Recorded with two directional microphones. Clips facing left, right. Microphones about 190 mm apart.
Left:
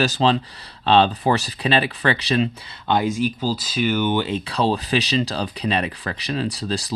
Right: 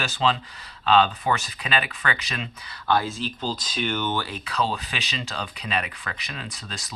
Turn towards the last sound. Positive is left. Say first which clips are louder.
# left 13 dB
turn(degrees=35)  # may be behind; listen again after turning